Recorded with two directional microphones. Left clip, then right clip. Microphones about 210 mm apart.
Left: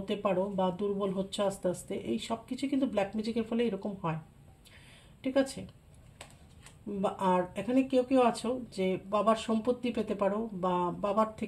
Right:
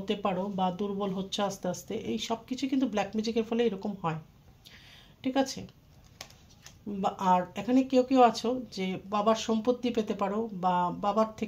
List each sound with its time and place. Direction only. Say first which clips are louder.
0.0 s speech: even; 35° right (ahead or behind)
5.2 s speech: even; 35° right (ahead or behind)
7.0 s speech: right 3 dB; 35° right (ahead or behind)